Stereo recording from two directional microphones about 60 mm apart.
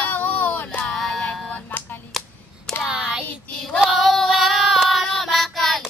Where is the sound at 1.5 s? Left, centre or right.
Left.